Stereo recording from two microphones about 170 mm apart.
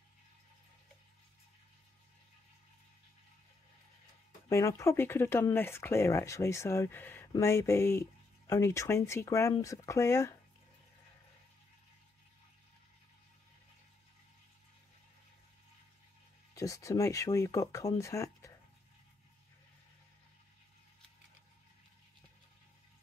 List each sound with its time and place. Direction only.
4.5 s speech: 15° left (ahead or behind)
16.5 s speech: 20° left (ahead or behind)